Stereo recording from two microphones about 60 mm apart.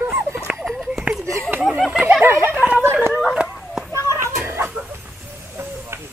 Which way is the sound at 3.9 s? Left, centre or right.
Right.